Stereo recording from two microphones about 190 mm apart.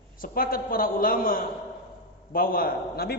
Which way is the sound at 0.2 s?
50° left (ahead or behind).